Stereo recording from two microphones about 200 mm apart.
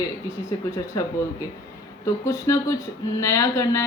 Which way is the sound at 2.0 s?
15° left (ahead or behind).